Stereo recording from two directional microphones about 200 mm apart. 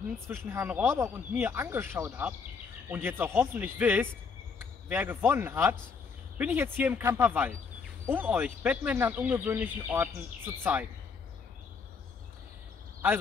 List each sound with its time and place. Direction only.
0.5 s speech: 10° right (ahead or behind)